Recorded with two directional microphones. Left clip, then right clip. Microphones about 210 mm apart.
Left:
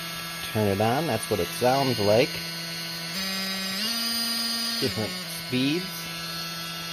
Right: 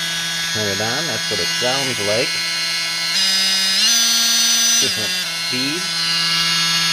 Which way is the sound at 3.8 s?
10° right (ahead or behind).